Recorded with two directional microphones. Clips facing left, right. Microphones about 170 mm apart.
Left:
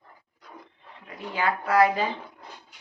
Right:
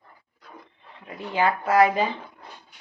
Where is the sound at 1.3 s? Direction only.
25° right (ahead or behind).